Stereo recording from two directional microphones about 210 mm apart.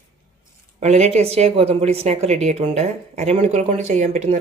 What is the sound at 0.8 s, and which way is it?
Speech, 30° right (ahead or behind).